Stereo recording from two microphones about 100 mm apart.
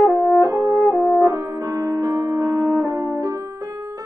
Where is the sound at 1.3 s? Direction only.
35° right (ahead or behind).